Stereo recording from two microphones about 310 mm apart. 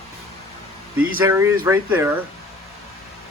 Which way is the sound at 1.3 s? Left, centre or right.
Centre.